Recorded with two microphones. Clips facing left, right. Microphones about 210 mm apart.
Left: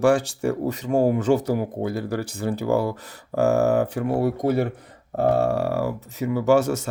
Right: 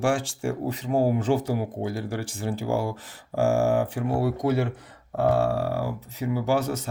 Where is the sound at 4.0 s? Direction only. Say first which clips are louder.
Left 3 dB; 55° left (ahead or behind).